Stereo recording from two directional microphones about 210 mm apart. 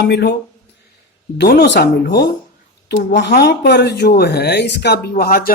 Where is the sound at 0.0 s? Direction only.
55° left (ahead or behind).